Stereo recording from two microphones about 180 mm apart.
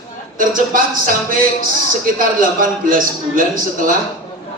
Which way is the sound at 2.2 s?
50° right (ahead or behind).